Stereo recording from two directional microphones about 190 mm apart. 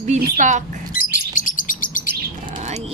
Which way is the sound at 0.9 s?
45° left (ahead or behind).